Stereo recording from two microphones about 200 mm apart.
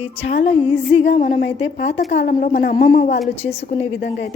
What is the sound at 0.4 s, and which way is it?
Speech, 30° left (ahead or behind).